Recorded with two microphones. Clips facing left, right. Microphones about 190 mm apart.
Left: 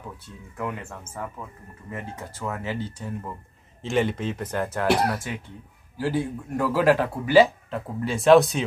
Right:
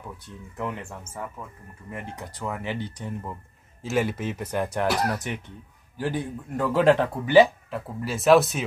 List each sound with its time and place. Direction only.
1.2 s speech: 15° right (ahead or behind)
4.8 s speech: 30° left (ahead or behind)
5.1 s speech: 20° right (ahead or behind)
7.7 s speech: 5° right (ahead or behind)